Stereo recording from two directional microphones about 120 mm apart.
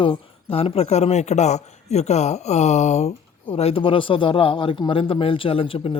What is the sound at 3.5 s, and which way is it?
Speech, 55° left (ahead or behind).